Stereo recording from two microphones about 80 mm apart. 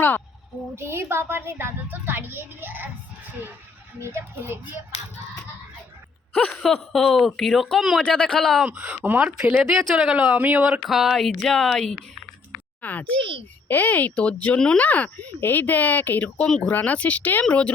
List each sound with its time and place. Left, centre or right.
0.8 s speech: right
4.0 s speech: right
6.3 s speech: centre
8.6 s speech: centre
10.6 s speech: centre
12.8 s speech: left
13.1 s a child's voice: right
13.7 s speech: left
16.5 s speech: centre